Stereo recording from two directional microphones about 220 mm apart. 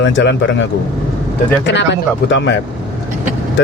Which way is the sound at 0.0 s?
55° left (ahead or behind).